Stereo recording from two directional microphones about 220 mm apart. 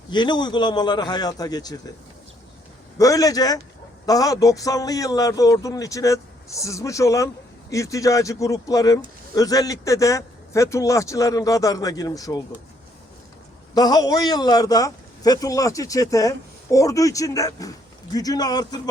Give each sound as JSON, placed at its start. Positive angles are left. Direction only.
{"t": 0.1, "sound": "a man's voice", "side_deg": 20}
{"t": 3.0, "sound": "a man's voice", "side_deg": 15}
{"t": 13.7, "sound": "a man's voice", "side_deg": 15}